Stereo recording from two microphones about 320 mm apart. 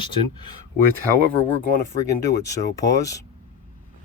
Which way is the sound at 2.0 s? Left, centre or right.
Centre.